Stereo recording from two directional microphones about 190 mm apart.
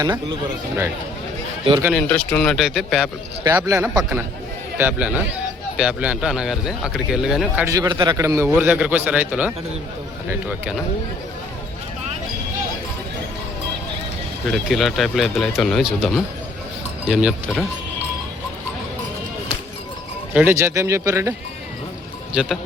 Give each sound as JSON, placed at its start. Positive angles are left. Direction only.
{"t": 0.0, "sound": "speech", "side_deg": -20}
{"t": 1.9, "sound": "speech", "side_deg": 5}
{"t": 3.4, "sound": "a man's voice", "side_deg": -15}
{"t": 7.7, "sound": "a man's voice", "side_deg": -20}
{"t": 14.5, "sound": "speech", "side_deg": 0}
{"t": 20.3, "sound": "a man's voice", "side_deg": -10}
{"t": 22.3, "sound": "speech", "side_deg": -5}